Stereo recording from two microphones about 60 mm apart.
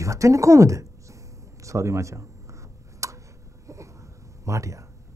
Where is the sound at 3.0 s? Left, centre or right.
Right.